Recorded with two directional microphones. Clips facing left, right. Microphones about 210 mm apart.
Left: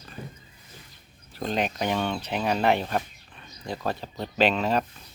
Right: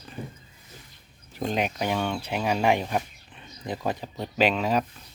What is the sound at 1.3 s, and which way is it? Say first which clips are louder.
Speech: even; 10° right (ahead or behind).